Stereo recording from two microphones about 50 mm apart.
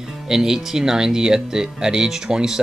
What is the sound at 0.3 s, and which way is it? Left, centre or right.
Speech, centre.